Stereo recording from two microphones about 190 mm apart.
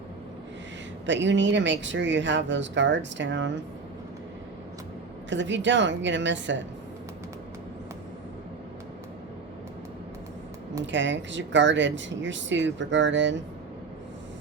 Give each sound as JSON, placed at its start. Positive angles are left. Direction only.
{"t": 1.0, "sound": "speech", "side_deg": -70}
{"t": 5.3, "sound": "speech", "side_deg": -70}
{"t": 10.9, "sound": "speech", "side_deg": -70}